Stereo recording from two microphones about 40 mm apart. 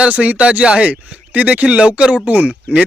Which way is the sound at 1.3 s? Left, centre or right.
Right.